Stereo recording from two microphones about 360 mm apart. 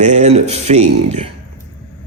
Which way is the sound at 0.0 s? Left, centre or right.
Centre.